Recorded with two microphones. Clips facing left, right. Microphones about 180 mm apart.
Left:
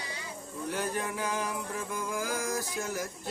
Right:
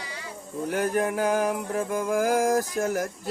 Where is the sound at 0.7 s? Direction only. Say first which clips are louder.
Right 8 dB; 55° right (ahead or behind).